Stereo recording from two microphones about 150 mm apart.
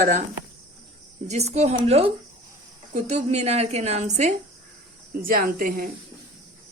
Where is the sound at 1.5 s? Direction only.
45° right (ahead or behind).